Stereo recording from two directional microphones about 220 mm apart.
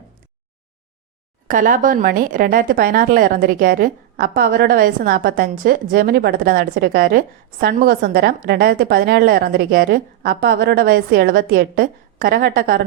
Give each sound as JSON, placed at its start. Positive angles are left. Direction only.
{"t": 1.5, "sound": "a woman's voice", "side_deg": -40}